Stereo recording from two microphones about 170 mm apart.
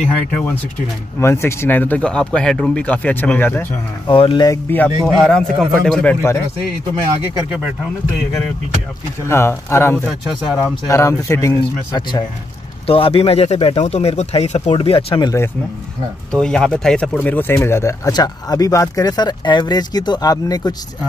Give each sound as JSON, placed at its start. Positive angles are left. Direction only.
{"t": 1.2, "sound": "speech", "side_deg": 15}
{"t": 4.1, "sound": "speech", "side_deg": 30}
{"t": 4.6, "sound": "a man's voice", "side_deg": 10}
{"t": 9.3, "sound": "speech", "side_deg": 15}
{"t": 10.0, "sound": "a man's voice", "side_deg": 0}
{"t": 10.9, "sound": "speech", "side_deg": 15}
{"t": 12.8, "sound": "speech", "side_deg": 35}
{"t": 16.3, "sound": "speech", "side_deg": 5}